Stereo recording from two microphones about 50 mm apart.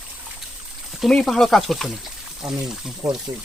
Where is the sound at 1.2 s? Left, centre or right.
Centre.